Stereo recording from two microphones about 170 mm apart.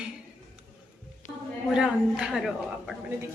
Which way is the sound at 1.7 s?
5° right (ahead or behind).